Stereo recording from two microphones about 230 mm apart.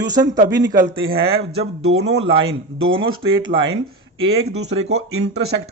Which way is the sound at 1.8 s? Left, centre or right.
Right.